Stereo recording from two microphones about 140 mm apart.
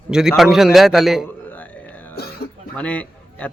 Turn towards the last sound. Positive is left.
turn(degrees=10)  # may be behind; listen again after turning